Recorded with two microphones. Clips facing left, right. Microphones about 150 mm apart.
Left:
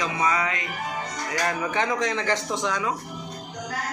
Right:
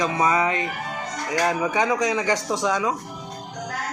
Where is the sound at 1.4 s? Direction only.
15° right (ahead or behind).